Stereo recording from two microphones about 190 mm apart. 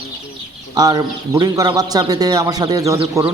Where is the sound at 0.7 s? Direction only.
20° right (ahead or behind).